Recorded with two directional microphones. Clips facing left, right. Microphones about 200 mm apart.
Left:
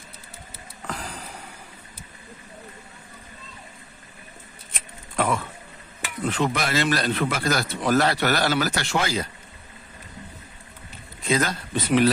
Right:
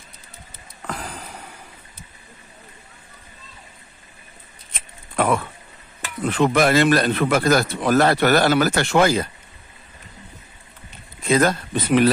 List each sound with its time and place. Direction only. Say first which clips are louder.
5.1 s a man's voice: right 4 dB; 60° right (ahead or behind)
11.2 s speech: right 6 dB; 55° right (ahead or behind)